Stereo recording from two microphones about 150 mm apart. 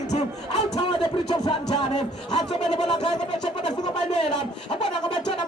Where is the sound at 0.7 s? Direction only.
35° left (ahead or behind).